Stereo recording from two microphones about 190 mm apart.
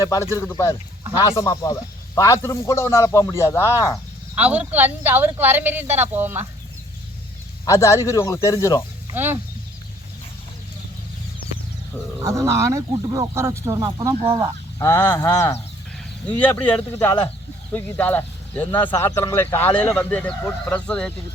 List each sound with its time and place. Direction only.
0.0 s a man's voice: 15° left (ahead or behind)
4.4 s speech: 5° right (ahead or behind)
7.6 s a man's voice: 15° left (ahead or behind)
9.1 s speech: 10° right (ahead or behind)
12.2 s speech: 15° right (ahead or behind)
14.8 s a man's voice: 15° left (ahead or behind)